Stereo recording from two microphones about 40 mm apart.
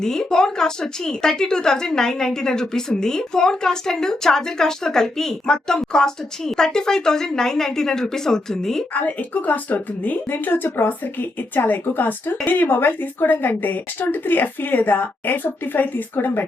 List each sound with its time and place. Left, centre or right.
0.0 s a woman's voice: centre
8.9 s speech: left
10.2 s speech: left